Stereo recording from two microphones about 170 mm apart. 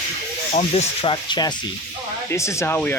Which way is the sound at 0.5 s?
40° left (ahead or behind).